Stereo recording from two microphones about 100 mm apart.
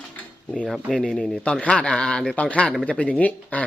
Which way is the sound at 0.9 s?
5° left (ahead or behind).